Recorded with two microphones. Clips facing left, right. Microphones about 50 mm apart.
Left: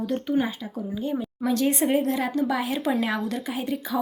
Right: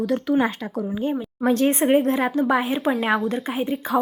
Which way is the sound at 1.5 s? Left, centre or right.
Right.